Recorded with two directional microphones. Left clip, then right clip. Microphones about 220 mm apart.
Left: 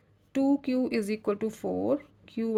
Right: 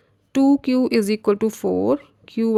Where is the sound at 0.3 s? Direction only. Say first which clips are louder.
Right 9 dB; 35° right (ahead or behind).